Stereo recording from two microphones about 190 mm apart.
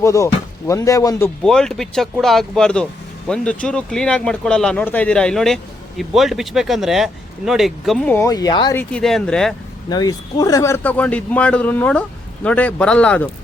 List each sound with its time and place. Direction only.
0.0 s a man's voice: 15° left (ahead or behind)
1.5 s speech: 5° left (ahead or behind); by 8.7 s 20° left (ahead or behind)
8.7 s speech: 5° left (ahead or behind)
9.9 s a man's voice: 20° left (ahead or behind)